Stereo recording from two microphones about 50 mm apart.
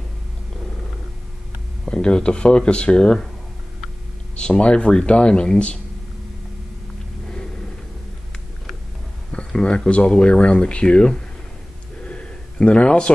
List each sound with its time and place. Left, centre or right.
1.9 s speech: centre
4.4 s speech: left
9.5 s speech: centre
12.0 s a sound: left